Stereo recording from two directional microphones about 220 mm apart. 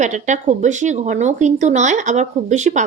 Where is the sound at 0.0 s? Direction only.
35° right (ahead or behind).